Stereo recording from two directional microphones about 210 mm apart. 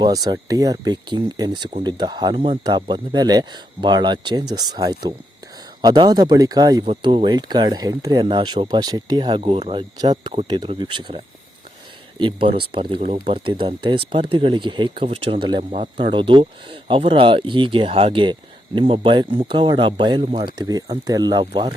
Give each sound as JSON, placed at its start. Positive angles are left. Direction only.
{"t": 0.0, "sound": "speech", "side_deg": -20}
{"t": 12.2, "sound": "speech", "side_deg": -25}